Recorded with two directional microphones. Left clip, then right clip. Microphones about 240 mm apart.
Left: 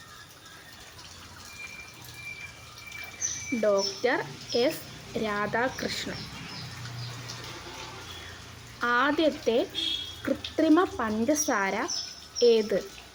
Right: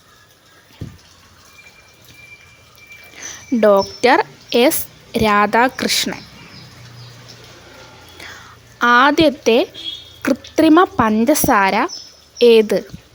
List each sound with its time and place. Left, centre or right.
3.6 s speech: right
8.8 s speech: right